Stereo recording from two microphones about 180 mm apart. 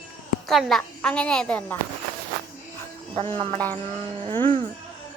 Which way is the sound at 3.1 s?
30° right (ahead or behind).